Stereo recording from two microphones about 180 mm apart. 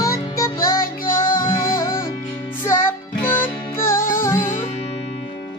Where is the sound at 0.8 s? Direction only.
50° left (ahead or behind).